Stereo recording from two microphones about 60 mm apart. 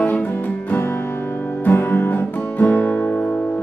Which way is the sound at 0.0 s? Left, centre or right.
Left.